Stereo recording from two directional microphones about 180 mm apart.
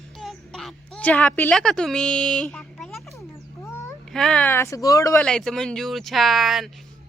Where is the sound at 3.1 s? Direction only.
15° left (ahead or behind).